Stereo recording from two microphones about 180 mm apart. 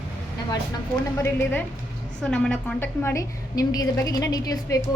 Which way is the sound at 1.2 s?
10° left (ahead or behind).